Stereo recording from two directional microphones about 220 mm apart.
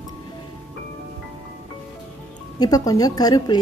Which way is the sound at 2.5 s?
15° left (ahead or behind).